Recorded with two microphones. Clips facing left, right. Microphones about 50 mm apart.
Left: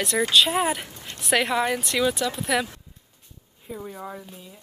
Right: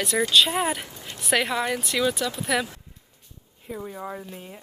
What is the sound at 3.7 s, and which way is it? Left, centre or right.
Speech, centre.